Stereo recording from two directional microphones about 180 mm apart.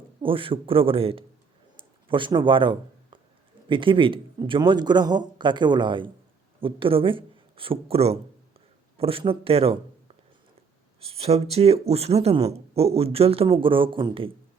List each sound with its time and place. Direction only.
0.2 s speech: 30° right (ahead or behind)
1.7 s a sound: 30° right (ahead or behind)
3.7 s a man's voice: 30° right (ahead or behind)
11.0 s speech: 35° right (ahead or behind)